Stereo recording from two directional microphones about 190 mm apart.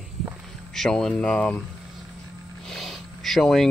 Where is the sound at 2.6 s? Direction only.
Centre (ahead or behind).